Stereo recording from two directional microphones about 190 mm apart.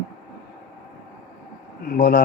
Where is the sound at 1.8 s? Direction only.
50° left (ahead or behind).